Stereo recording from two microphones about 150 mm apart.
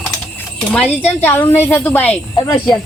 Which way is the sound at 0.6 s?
5° left (ahead or behind).